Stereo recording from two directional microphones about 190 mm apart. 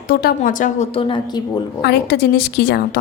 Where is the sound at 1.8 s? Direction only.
60° left (ahead or behind).